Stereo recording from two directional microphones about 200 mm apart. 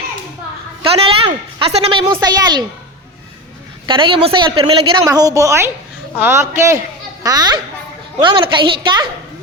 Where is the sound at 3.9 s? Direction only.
25° right (ahead or behind).